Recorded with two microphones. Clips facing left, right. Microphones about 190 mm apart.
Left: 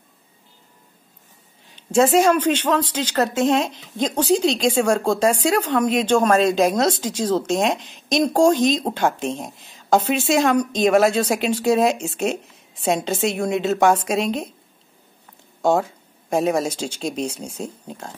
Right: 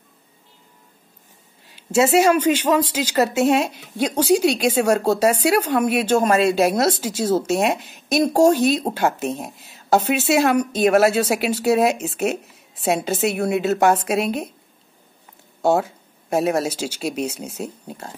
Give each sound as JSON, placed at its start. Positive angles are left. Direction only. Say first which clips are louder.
{"t": 1.8, "sound": "speech", "louder": "even", "side_deg": -5}
{"t": 15.6, "sound": "speech", "louder": "even", "side_deg": -5}